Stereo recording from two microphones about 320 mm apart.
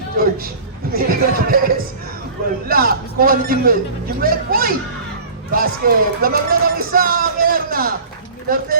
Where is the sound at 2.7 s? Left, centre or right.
Right.